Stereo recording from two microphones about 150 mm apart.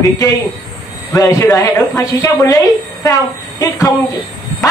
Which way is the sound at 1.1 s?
25° left (ahead or behind).